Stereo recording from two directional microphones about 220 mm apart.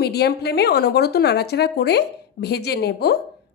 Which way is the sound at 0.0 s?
45° left (ahead or behind).